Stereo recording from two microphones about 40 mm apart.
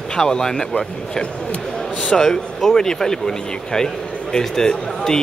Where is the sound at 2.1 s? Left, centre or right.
Centre.